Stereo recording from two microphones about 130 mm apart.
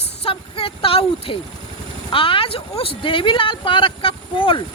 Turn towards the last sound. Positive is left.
turn(degrees=40)  # may be behind; listen again after turning